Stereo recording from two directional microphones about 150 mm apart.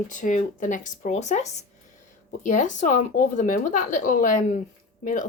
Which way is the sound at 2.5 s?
55° left (ahead or behind).